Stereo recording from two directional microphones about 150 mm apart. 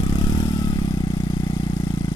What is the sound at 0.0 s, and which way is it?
Vehicle, 30° left (ahead or behind).